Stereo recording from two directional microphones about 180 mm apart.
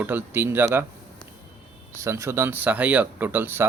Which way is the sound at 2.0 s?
15° right (ahead or behind).